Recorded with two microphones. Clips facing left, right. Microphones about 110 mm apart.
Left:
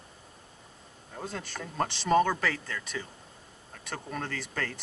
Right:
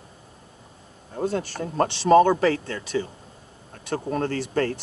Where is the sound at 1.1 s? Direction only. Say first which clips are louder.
Right 12 dB; 30° right (ahead or behind).